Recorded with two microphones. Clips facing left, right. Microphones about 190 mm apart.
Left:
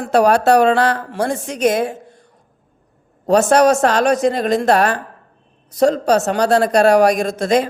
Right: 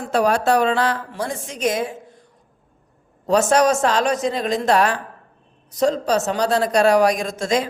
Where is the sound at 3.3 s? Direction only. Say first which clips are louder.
Left 4 dB; 60° left (ahead or behind).